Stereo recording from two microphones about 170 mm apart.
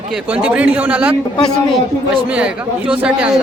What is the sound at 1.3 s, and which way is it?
A man's voice, 5° left (ahead or behind).